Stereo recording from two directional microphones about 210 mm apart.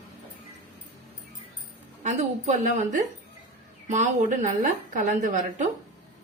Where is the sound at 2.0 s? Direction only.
35° right (ahead or behind).